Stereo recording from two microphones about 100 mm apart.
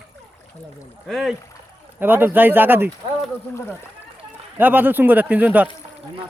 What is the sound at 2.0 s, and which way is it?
Speech, 20° right (ahead or behind).